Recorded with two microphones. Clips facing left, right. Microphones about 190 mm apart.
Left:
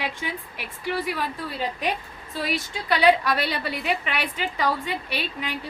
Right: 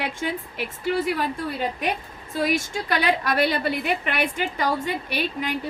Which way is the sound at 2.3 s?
45° right (ahead or behind).